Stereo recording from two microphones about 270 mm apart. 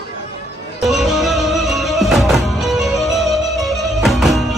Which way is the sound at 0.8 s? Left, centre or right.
Centre.